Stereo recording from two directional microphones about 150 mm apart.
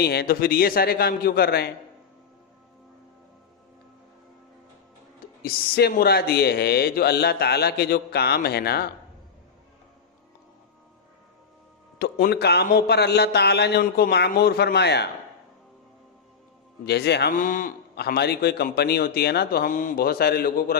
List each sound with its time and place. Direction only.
0.0 s speech: 90° left
5.4 s speech: 90° left
11.9 s speech: 85° left
16.8 s speech: 90° left